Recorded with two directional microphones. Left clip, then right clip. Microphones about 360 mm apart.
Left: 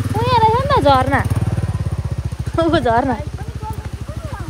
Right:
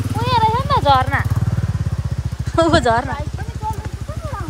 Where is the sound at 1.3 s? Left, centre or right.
Left.